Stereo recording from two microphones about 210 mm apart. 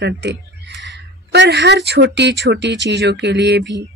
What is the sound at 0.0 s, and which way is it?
Speech, 55° right (ahead or behind).